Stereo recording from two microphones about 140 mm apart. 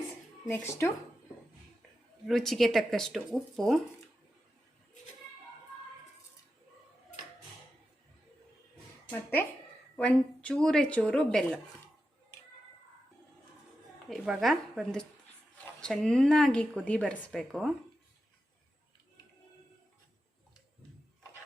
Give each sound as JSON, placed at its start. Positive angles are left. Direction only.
{"t": 0.4, "sound": "speech", "side_deg": 15}
{"t": 2.2, "sound": "speech", "side_deg": 0}
{"t": 9.0, "sound": "speech", "side_deg": 15}
{"t": 14.1, "sound": "speech", "side_deg": 0}